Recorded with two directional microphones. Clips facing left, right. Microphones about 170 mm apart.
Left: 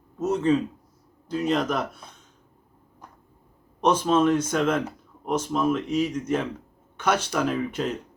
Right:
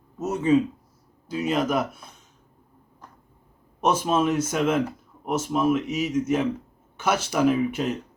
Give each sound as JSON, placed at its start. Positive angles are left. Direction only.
{"t": 0.2, "sound": "speech", "side_deg": -10}
{"t": 3.8, "sound": "speech", "side_deg": -10}